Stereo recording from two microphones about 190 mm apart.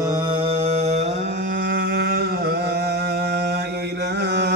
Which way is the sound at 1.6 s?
65° right (ahead or behind).